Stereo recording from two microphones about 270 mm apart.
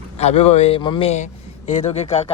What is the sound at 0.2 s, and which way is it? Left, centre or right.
A man's voice, left.